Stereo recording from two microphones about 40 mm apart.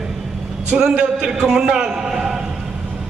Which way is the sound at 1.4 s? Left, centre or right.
Centre.